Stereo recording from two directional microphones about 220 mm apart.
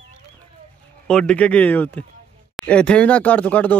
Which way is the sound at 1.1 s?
5° left (ahead or behind).